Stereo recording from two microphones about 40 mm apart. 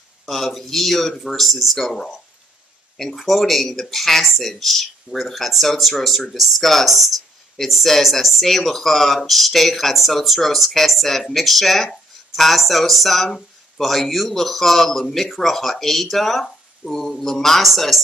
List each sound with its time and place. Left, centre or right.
0.3 s speech: centre